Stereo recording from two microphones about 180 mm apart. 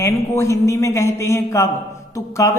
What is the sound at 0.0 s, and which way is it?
A man's voice, 15° left (ahead or behind).